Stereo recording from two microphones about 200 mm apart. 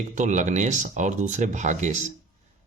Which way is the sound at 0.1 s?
40° right (ahead or behind).